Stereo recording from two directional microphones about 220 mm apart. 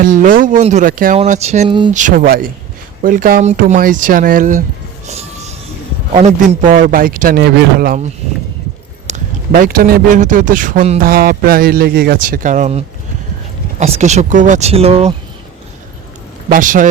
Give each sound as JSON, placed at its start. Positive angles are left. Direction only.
{"t": 0.0, "sound": "speech", "side_deg": -40}
{"t": 1.9, "sound": "speech", "side_deg": -35}
{"t": 5.0, "sound": "music", "side_deg": -30}
{"t": 6.1, "sound": "speech", "side_deg": -30}
{"t": 16.5, "sound": "speech", "side_deg": -35}